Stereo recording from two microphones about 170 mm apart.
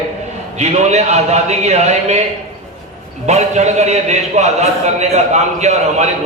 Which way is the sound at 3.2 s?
40° right (ahead or behind).